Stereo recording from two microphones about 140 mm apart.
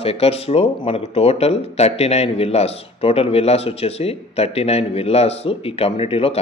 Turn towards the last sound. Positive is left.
turn(degrees=45)  # may be behind; listen again after turning